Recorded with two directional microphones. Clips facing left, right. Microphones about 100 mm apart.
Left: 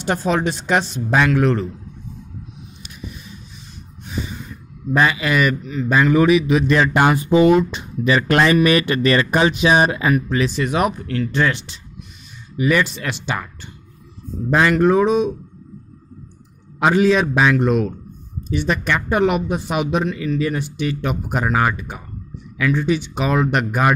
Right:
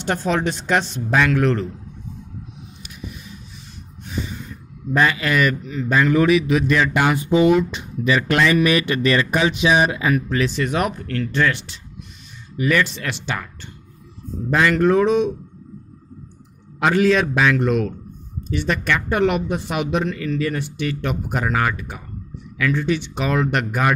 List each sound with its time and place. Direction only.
0.0 s speech: 15° left (ahead or behind)
4.9 s speech: 15° left (ahead or behind)
5.7 s a man's voice: 5° left (ahead or behind)
5.9 s a man's voice: 15° left (ahead or behind)
6.7 s speech: 35° left (ahead or behind)
10.1 s speech: 15° left (ahead or behind)
14.5 s speech: 20° left (ahead or behind)
16.8 s a man's voice: 20° left (ahead or behind)